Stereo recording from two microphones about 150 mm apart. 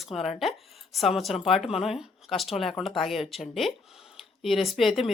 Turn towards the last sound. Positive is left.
turn(degrees=0)  # may be behind; listen again after turning